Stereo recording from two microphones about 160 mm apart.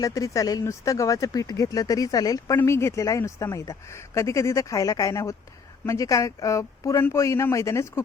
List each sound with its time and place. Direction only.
0.0 s speech: 20° left (ahead or behind)